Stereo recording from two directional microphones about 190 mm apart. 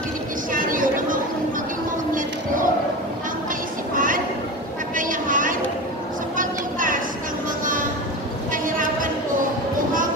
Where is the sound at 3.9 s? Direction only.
45° right (ahead or behind).